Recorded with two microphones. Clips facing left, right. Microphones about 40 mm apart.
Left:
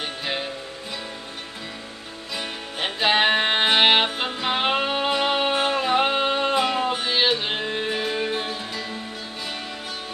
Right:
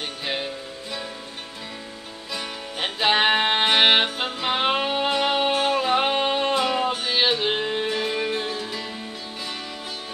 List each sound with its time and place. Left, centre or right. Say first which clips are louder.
2.3 s music: even; centre
5.5 s music: right 1 dB; centre
5.9 s music: even; centre
6.5 s music: even; centre
7.2 s carnatic music: right 2 dB; centre
7.9 s music: even; centre